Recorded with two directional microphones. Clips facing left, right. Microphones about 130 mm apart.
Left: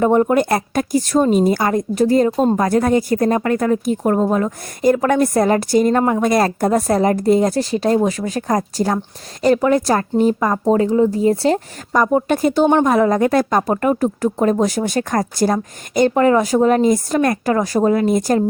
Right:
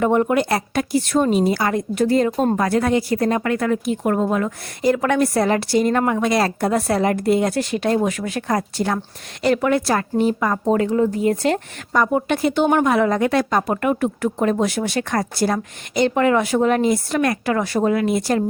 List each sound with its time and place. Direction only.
0.0 s a woman's voice: 35° left (ahead or behind)
0.4 s a woman's voice: 45° left (ahead or behind)
6.0 s speech: 25° left (ahead or behind)
6.2 s a woman's voice: 45° left (ahead or behind)